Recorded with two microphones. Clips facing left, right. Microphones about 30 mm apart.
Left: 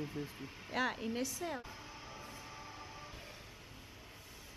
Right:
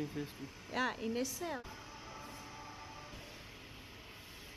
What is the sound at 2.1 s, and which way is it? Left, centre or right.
Train, centre.